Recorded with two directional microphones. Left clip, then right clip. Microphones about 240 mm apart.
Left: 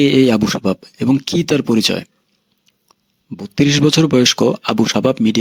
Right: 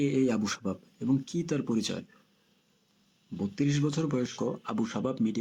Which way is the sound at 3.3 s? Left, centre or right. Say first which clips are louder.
Left 16 dB; left.